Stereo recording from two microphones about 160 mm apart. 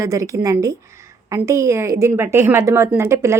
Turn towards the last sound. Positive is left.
turn(degrees=-15)  # may be behind; listen again after turning